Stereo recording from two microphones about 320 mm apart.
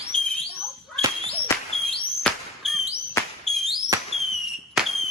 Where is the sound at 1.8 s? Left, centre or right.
Centre.